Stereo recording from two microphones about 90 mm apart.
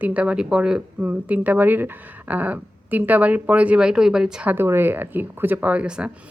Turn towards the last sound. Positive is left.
turn(degrees=-15)  # may be behind; listen again after turning